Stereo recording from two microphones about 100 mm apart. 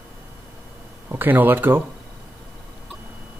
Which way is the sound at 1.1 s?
20° right (ahead or behind).